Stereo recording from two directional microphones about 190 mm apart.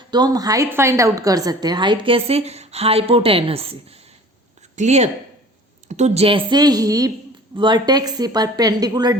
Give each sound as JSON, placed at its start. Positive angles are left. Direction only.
{"t": 0.1, "sound": "a woman's voice", "side_deg": -20}